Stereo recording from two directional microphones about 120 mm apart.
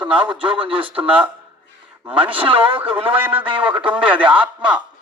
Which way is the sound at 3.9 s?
10° right (ahead or behind).